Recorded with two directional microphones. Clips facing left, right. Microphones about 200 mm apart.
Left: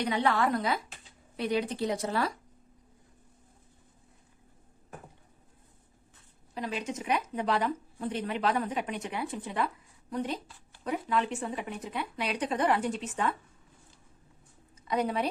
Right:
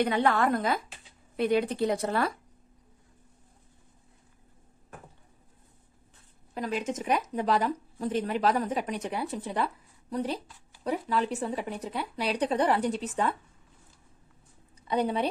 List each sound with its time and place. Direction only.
0.0 s a woman's voice: 55° right (ahead or behind)
6.5 s a woman's voice: 45° right (ahead or behind)
14.8 s a woman's voice: 30° right (ahead or behind)